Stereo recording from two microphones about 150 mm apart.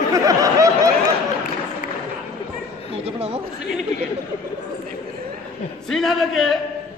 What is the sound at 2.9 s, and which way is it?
Speech, 40° right (ahead or behind).